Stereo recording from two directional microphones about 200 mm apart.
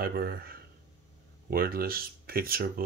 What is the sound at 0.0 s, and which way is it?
A man's voice, 50° right (ahead or behind).